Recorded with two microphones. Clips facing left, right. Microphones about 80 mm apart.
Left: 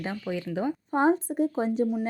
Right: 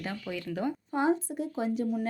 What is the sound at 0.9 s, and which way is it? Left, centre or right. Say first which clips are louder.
Speech: left 5 dB; left.